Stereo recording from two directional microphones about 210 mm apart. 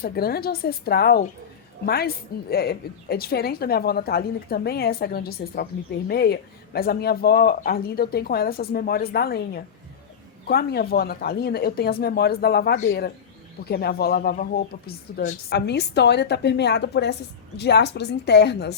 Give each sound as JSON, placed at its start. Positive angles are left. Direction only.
{"t": 0.0, "sound": "a woman's voice", "side_deg": 45}
{"t": 15.4, "sound": "a woman's voice", "side_deg": 50}